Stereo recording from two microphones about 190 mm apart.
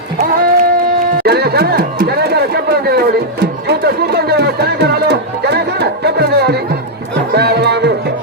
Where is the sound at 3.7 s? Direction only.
60° right (ahead or behind).